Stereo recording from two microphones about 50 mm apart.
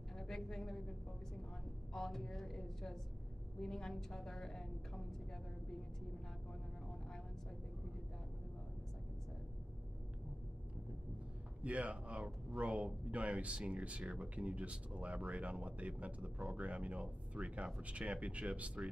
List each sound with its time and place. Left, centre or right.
0.2 s a sound: centre
2.0 s a woman's voice: centre
11.6 s speech: right